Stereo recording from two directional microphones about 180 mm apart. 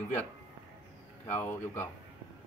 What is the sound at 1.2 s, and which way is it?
Speech, 10° left (ahead or behind).